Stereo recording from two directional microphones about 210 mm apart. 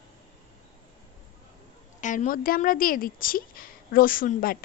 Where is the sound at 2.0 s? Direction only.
35° left (ahead or behind).